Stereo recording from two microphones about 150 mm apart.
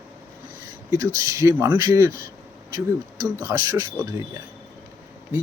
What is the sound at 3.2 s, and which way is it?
Speech, 20° right (ahead or behind).